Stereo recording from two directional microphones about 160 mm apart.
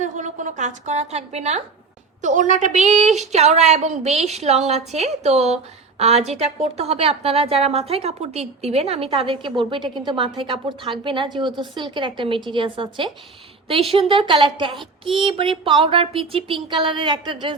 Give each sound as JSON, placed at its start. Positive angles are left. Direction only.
{"t": 0.0, "sound": "a woman's voice", "side_deg": -50}